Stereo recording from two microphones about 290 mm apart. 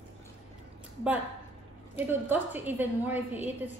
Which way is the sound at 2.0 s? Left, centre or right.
Centre.